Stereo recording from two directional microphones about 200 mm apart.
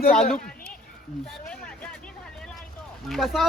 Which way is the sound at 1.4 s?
5° left (ahead or behind).